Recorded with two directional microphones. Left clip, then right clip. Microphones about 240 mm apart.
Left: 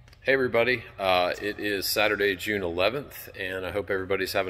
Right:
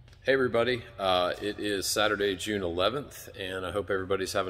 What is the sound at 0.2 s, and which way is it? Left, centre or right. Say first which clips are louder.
Speech: left 2 dB; centre.